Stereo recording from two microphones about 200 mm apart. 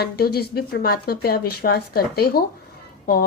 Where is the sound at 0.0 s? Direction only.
55° left (ahead or behind).